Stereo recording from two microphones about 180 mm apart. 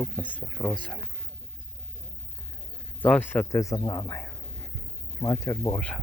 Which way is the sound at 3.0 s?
10° left (ahead or behind).